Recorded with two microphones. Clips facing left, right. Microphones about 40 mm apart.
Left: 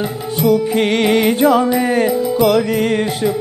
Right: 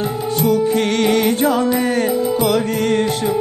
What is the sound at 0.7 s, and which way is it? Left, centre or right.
Music, centre.